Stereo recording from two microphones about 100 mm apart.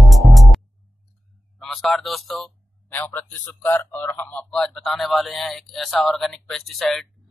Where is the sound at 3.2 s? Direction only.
15° left (ahead or behind).